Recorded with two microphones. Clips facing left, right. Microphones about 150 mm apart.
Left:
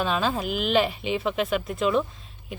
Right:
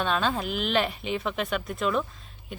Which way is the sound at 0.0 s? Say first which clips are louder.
Left 1 dB; 5° left (ahead or behind).